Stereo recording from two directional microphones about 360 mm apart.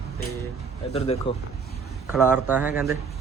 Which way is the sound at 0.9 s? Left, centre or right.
Centre.